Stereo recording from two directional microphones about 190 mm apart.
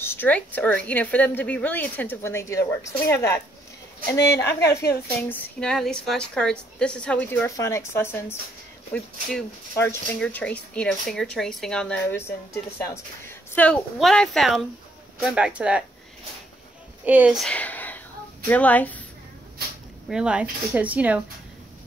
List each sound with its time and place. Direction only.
0.0 s a woman's voice: 10° left (ahead or behind)
4.5 s speech: 60° left (ahead or behind)
5.3 s a woman's voice: 5° left (ahead or behind)
17.0 s a woman's voice: 10° right (ahead or behind); by 18.9 s 10° left (ahead or behind)
20.1 s speech: 5° right (ahead or behind)